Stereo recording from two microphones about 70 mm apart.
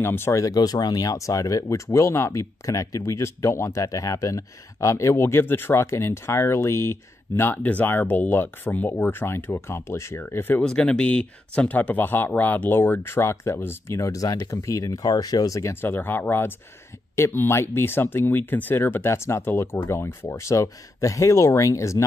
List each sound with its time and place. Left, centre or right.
0.0 s speech: left
0.4 s speech: left
7.5 s speech: left
10.6 s speech: centre; by 14.3 s left
14.3 s speech: left
14.7 s speech: left
15.6 s speech: left